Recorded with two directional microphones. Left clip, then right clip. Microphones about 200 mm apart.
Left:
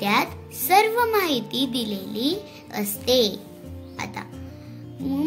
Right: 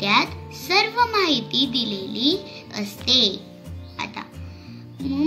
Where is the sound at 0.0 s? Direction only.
55° left (ahead or behind).